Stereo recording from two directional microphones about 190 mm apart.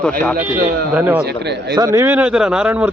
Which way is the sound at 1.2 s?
60° right (ahead or behind).